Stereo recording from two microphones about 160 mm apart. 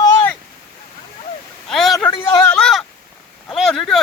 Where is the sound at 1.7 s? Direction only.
Centre (ahead or behind).